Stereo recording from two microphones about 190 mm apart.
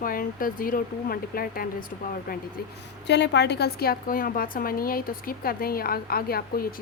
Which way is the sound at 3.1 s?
65° left (ahead or behind).